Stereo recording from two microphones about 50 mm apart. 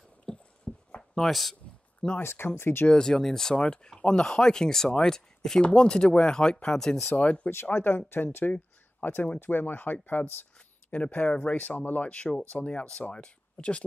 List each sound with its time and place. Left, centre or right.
0.3 s a sound: centre
0.7 s a sound: centre
1.1 s speech: centre
2.2 s speech: left
2.9 s speech: centre
7.0 s speech: left
7.7 s speech: left
10.9 s speech: left